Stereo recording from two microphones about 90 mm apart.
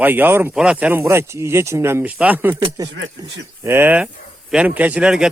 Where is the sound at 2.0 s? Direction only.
15° right (ahead or behind).